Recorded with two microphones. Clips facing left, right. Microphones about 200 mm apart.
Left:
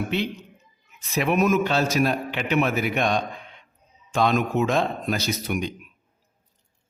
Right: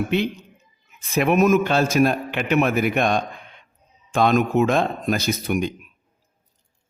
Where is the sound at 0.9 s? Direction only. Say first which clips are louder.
Right 4 dB; 50° right (ahead or behind).